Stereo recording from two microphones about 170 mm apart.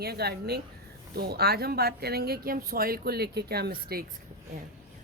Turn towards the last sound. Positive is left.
turn(degrees=-60)  # may be behind; listen again after turning